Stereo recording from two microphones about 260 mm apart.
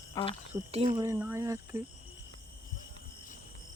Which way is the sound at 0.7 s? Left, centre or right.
Right.